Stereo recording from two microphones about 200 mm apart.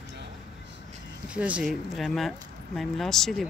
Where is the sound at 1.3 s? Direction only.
5° right (ahead or behind).